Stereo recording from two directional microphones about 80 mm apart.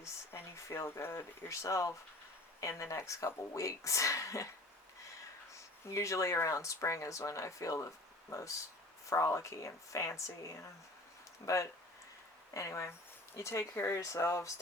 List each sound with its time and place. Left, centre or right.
0.0 s speech: left
5.5 s speech: left